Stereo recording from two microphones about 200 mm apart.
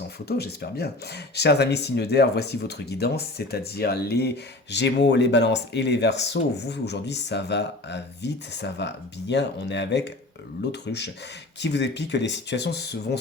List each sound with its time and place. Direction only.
0.3 s speech: 55° left (ahead or behind)